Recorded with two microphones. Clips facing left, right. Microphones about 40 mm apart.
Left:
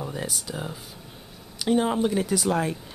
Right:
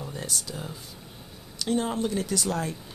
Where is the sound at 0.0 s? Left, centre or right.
Left.